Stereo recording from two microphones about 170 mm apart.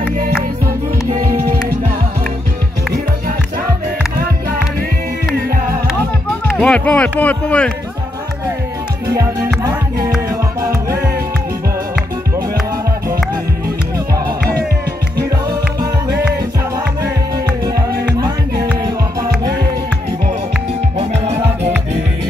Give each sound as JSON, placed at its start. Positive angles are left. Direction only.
{"t": 1.1, "sound": "music", "side_deg": -55}
{"t": 6.4, "sound": "speech", "side_deg": 10}
{"t": 9.0, "sound": "music", "side_deg": -20}
{"t": 18.1, "sound": "music", "side_deg": -20}